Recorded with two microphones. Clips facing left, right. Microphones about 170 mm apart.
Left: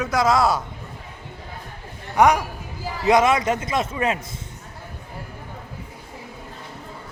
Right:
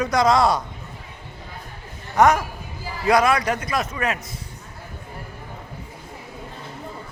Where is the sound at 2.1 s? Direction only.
15° left (ahead or behind).